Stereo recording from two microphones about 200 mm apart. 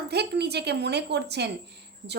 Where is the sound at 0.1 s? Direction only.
55° right (ahead or behind).